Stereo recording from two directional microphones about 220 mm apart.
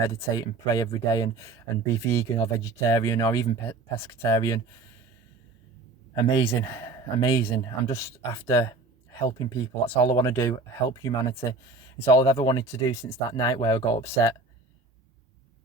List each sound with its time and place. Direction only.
0.0 s speech: 15° left (ahead or behind)
6.1 s speech: 15° left (ahead or behind)